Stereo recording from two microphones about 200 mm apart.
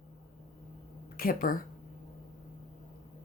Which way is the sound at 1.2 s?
45° left (ahead or behind).